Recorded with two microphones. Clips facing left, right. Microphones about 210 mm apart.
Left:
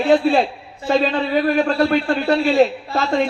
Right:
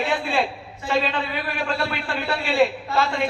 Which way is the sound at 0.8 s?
40° left (ahead or behind).